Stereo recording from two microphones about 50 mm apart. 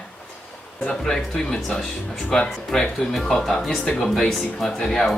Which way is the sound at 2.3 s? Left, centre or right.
Centre.